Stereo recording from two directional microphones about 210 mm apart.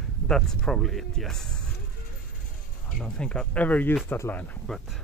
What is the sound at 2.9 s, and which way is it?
Speech, 5° left (ahead or behind).